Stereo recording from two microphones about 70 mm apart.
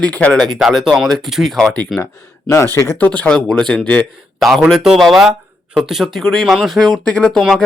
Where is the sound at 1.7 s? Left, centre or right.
Centre.